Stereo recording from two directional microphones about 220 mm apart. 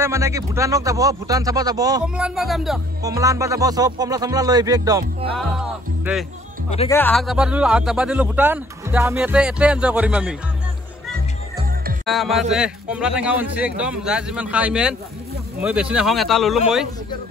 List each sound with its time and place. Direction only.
0.0 s speech: 15° right (ahead or behind)
2.1 s speech: 5° right (ahead or behind)
3.0 s speech: 15° right (ahead or behind)
5.4 s music: centre (ahead or behind)
6.9 s speech: 10° left (ahead or behind)
12.1 s speech: centre (ahead or behind)